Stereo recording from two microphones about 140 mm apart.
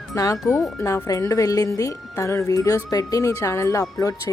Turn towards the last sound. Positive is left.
turn(degrees=25)  # may be behind; listen again after turning